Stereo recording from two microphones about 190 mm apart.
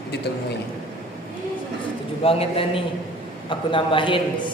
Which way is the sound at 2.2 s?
30° left (ahead or behind).